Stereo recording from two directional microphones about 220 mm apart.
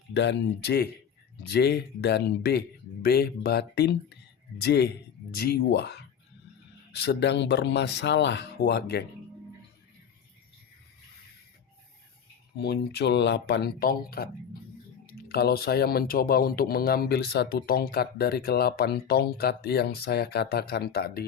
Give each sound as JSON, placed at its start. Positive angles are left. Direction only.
{"t": 0.1, "sound": "speech", "side_deg": 55}
{"t": 12.6, "sound": "speech", "side_deg": 50}